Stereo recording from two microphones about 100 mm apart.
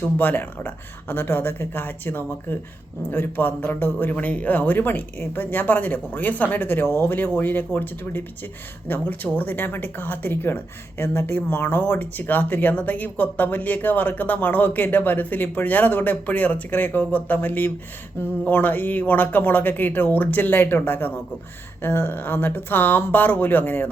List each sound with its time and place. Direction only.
0.0 s speech: 20° left (ahead or behind)